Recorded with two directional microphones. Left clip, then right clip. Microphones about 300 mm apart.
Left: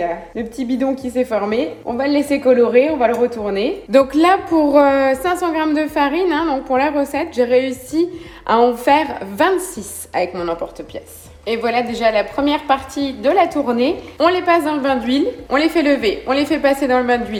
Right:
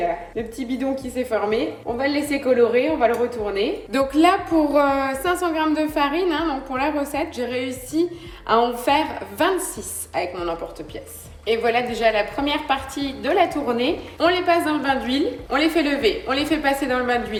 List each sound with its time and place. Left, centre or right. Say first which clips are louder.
1.3 s a woman's voice: left 3 dB; left